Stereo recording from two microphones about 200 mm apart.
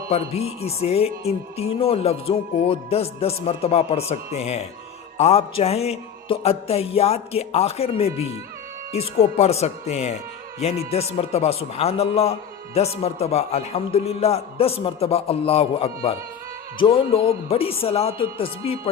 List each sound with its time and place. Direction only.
0.6 s a man's voice: 30° left (ahead or behind)